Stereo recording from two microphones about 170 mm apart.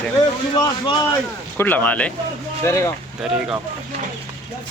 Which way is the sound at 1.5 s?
10° left (ahead or behind).